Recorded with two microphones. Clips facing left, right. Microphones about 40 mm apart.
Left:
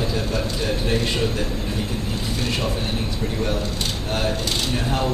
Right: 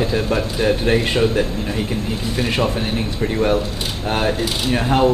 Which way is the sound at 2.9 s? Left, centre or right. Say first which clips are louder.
Right 5 dB; right.